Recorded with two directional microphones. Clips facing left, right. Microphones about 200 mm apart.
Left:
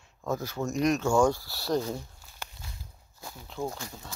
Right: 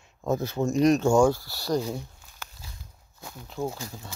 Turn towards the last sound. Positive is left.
turn(degrees=-5)  # may be behind; listen again after turning